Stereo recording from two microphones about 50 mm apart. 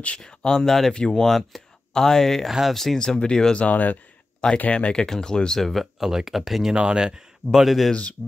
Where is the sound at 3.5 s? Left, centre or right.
Left.